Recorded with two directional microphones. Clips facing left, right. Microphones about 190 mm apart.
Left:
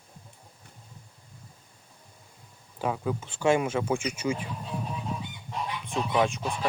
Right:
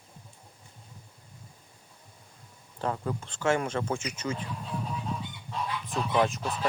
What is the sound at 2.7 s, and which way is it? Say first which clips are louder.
Speech: left 2 dB; 5° left (ahead or behind).